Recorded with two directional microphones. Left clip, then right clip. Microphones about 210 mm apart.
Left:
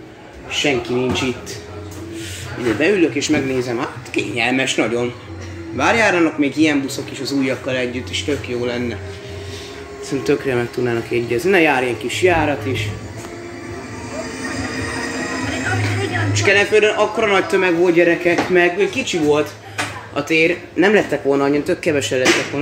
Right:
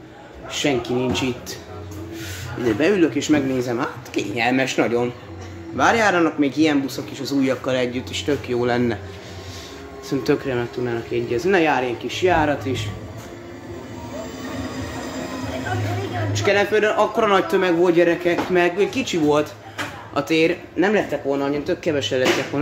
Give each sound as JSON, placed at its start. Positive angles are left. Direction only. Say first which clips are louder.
{"t": 0.5, "sound": "speech", "louder": "left 3 dB", "side_deg": -15}
{"t": 2.8, "sound": "speech", "louder": "left 3 dB", "side_deg": -15}
{"t": 3.4, "sound": "speech", "louder": "left 2 dB", "side_deg": -10}
{"t": 10.0, "sound": "speech", "louder": "left 2 dB", "side_deg": -10}
{"t": 10.4, "sound": "speech", "louder": "left 5 dB", "side_deg": 5}
{"t": 16.3, "sound": "speech", "louder": "left 4 dB", "side_deg": -15}
{"t": 19.0, "sound": "speech", "louder": "left 2 dB", "side_deg": -20}
{"t": 20.7, "sound": "speech", "louder": "left 5 dB", "side_deg": 5}
{"t": 21.3, "sound": "speech", "louder": "left 8 dB", "side_deg": 20}
{"t": 21.6, "sound": "speech", "louder": "left 4 dB", "side_deg": 0}